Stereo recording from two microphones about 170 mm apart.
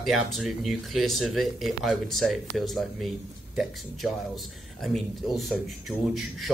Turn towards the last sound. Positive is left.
turn(degrees=0)  # may be behind; listen again after turning